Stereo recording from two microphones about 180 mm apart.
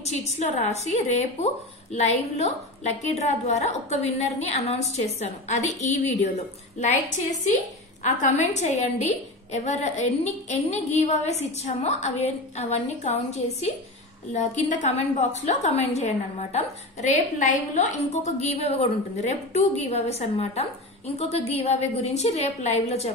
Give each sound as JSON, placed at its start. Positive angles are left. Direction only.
{"t": 0.0, "sound": "a woman's voice", "side_deg": 40}
{"t": 8.0, "sound": "a woman's voice", "side_deg": 40}